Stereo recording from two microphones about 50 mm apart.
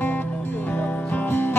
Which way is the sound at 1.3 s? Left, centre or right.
Left.